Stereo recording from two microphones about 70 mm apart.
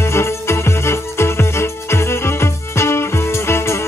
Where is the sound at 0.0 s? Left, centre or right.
Left.